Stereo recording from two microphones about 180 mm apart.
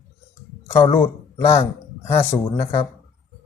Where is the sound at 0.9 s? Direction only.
10° left (ahead or behind).